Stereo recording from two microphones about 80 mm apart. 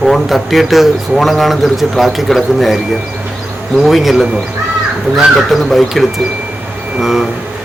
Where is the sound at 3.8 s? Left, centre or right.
Centre.